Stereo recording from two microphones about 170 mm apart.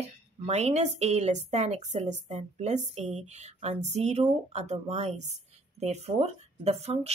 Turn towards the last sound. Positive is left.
turn(degrees=-40)  # may be behind; listen again after turning